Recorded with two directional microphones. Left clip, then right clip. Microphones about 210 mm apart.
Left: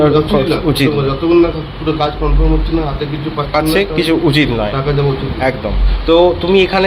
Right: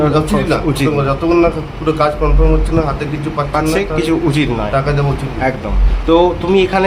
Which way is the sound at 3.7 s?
Centre (ahead or behind).